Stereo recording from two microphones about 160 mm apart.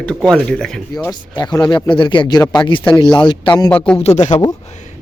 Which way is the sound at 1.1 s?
25° left (ahead or behind).